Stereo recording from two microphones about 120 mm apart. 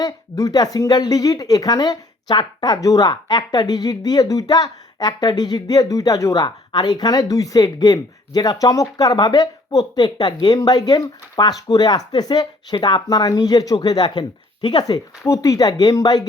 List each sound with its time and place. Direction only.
0.0 s a woman's voice: 30° left (ahead or behind)